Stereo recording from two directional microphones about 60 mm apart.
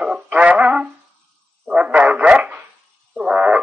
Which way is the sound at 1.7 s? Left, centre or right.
Right.